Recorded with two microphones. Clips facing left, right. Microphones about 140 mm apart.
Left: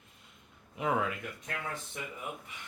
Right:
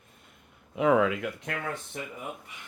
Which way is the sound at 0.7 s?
90° right.